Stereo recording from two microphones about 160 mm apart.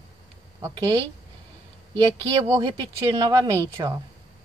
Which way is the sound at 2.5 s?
25° right (ahead or behind).